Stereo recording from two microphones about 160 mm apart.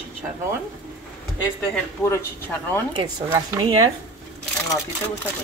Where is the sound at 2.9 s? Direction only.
30° right (ahead or behind).